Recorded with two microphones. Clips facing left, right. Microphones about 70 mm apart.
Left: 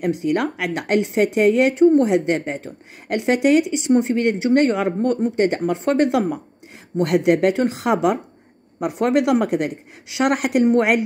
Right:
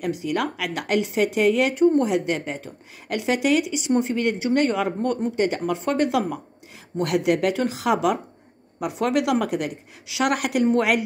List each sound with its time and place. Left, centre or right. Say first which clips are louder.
0.2 s a woman's voice: left 4 dB; left